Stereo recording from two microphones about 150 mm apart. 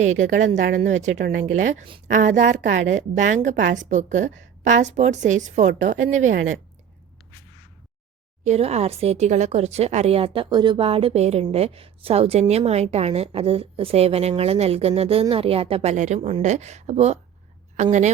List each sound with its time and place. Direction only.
0.0 s a woman's voice: 55° right (ahead or behind)
8.4 s a woman's voice: 45° right (ahead or behind)